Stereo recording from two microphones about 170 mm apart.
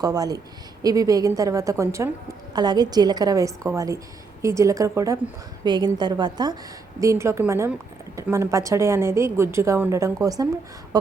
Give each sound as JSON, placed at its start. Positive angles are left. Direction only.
{"t": 0.0, "sound": "a woman's voice", "side_deg": -20}